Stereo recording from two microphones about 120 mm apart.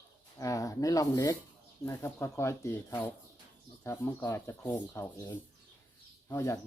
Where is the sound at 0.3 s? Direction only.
30° left (ahead or behind).